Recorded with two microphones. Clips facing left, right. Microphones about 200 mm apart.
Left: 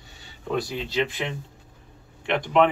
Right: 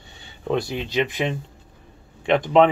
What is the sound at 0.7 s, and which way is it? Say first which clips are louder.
Speech: right 3 dB; 20° right (ahead or behind).